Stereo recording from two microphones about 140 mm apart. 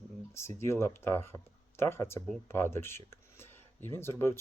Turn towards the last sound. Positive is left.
turn(degrees=20)  # may be behind; listen again after turning